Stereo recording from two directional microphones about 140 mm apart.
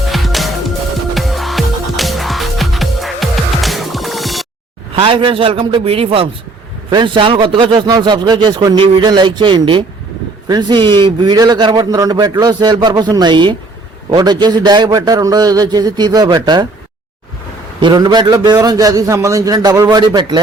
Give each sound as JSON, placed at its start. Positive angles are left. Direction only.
{"t": 0.1, "sound": "music", "side_deg": 0}
{"t": 4.9, "sound": "a man's voice", "side_deg": -35}
{"t": 17.7, "sound": "a man's voice", "side_deg": -35}